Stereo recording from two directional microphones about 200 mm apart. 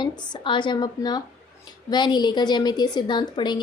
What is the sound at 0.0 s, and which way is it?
A woman's voice, 25° left (ahead or behind).